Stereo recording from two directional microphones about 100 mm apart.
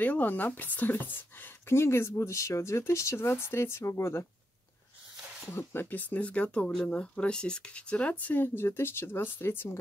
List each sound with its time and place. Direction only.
0.0 s speech: 15° left (ahead or behind)
5.2 s a sound: 10° right (ahead or behind)
5.5 s speech: 20° left (ahead or behind)